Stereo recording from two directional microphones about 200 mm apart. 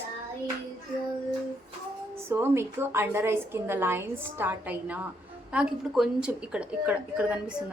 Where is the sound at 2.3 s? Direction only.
10° right (ahead or behind).